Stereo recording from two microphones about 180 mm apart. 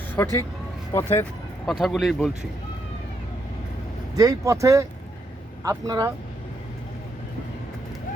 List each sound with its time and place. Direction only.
0.2 s speech: 15° left (ahead or behind)
1.6 s speech: centre (ahead or behind)
4.1 s speech: 20° right (ahead or behind)